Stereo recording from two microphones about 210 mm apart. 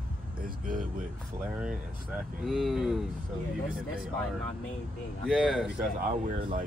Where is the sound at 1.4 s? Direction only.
5° right (ahead or behind).